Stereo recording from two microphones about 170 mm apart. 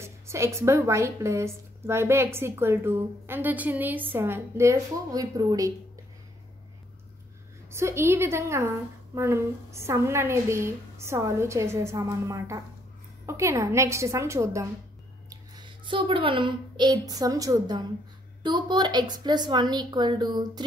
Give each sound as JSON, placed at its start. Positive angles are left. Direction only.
{"t": 0.0, "sound": "a woman's voice", "side_deg": -15}
{"t": 7.7, "sound": "a woman's voice", "side_deg": -15}